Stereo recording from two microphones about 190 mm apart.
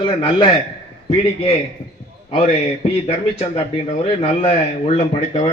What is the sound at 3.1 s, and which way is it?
Speech, 35° left (ahead or behind).